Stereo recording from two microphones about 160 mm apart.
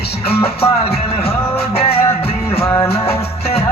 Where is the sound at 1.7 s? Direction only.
35° left (ahead or behind).